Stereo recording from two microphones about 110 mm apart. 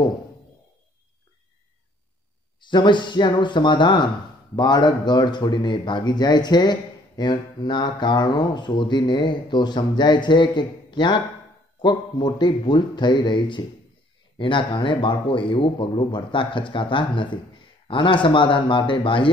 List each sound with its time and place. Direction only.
2.6 s speech: 45° left (ahead or behind)